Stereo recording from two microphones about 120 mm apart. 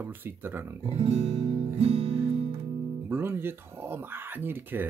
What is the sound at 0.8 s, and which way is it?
Music, 55° right (ahead or behind).